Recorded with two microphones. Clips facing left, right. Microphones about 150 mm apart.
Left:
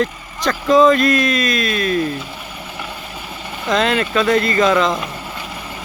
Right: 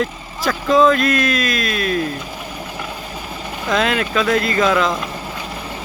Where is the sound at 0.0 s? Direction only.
Centre (ahead or behind).